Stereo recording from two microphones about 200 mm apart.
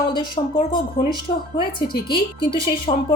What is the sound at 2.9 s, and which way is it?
Speech, 30° left (ahead or behind).